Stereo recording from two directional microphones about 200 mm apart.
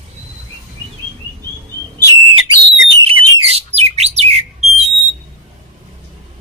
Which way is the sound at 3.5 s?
30° right (ahead or behind).